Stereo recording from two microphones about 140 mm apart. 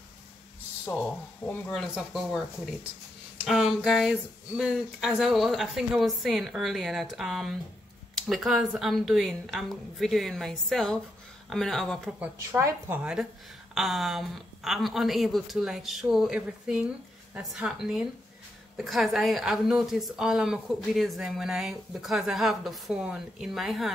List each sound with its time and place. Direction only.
0.8 s a woman's voice: 10° left (ahead or behind)
3.4 s a woman's voice: 5° right (ahead or behind)
12.2 s a woman's voice: 20° right (ahead or behind); by 23.9 s centre (ahead or behind)